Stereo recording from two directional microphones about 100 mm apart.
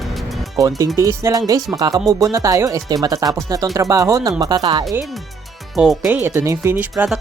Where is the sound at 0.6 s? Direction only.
35° right (ahead or behind).